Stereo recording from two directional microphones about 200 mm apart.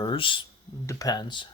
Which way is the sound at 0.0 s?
25° left (ahead or behind).